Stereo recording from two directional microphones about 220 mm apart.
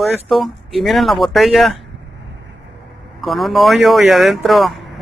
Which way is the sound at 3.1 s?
Centre (ahead or behind).